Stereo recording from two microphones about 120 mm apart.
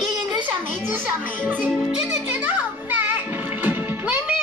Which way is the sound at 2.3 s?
15° right (ahead or behind).